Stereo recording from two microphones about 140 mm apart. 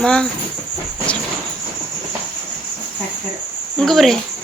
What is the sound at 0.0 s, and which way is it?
Speech, 5° left (ahead or behind).